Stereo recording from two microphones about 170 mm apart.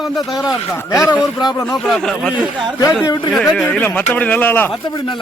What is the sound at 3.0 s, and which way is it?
Speech, 25° left (ahead or behind).